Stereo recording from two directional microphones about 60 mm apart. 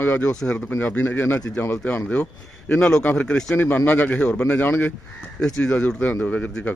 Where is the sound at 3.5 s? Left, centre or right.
Left.